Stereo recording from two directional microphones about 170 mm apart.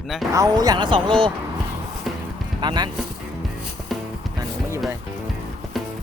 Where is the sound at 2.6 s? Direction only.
25° right (ahead or behind).